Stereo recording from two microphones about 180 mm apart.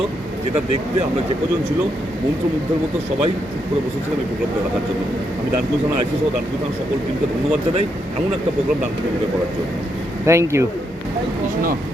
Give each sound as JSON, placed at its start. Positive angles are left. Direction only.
{"t": 10.2, "sound": "speech", "side_deg": -15}